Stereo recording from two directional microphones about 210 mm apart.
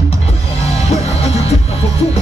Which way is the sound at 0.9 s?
30° left (ahead or behind).